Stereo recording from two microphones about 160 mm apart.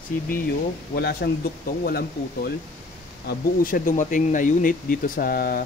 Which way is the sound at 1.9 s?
75° left (ahead or behind).